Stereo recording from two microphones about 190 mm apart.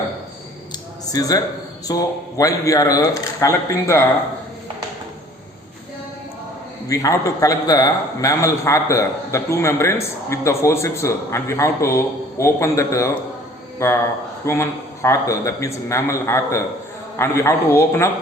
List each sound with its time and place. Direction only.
1.1 s a man's voice: 20° left (ahead or behind)
6.8 s a man's voice: 20° left (ahead or behind)